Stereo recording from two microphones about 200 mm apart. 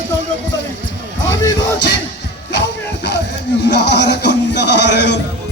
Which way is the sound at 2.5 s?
60° left (ahead or behind).